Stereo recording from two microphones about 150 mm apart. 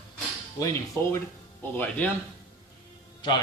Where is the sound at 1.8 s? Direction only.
10° left (ahead or behind).